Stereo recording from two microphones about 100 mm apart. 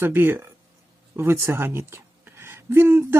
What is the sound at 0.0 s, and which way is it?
Speech, 20° right (ahead or behind).